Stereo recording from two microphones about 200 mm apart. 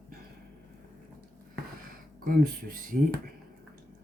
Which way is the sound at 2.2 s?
45° right (ahead or behind).